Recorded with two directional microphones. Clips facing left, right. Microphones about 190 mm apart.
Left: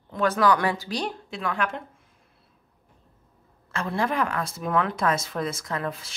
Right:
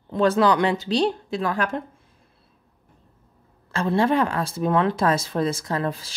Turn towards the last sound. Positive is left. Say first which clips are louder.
# right 4 dB
turn(degrees=-35)  # may be behind; listen again after turning